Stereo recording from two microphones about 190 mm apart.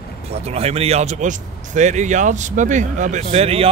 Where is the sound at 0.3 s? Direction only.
35° right (ahead or behind).